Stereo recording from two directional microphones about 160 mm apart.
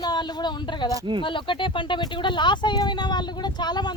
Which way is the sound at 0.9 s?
25° right (ahead or behind).